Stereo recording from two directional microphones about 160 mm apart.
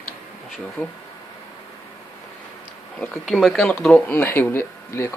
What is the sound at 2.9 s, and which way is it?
Speech, 5° left (ahead or behind).